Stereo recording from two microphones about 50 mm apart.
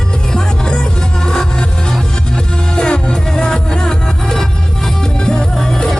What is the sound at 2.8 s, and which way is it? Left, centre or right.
Music, centre.